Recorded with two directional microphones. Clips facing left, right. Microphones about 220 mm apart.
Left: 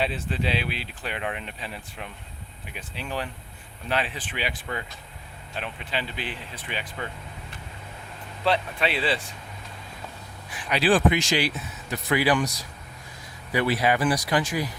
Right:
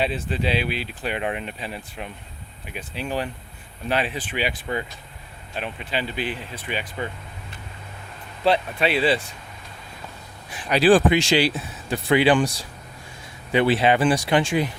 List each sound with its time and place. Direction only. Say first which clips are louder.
0.0 s speech: right 3 dB; 5° right (ahead or behind)
5.5 s speech: right 4 dB; 5° right (ahead or behind)
8.4 s speech: right 4 dB; 10° right (ahead or behind)
10.7 s speech: right 5 dB; 40° right (ahead or behind)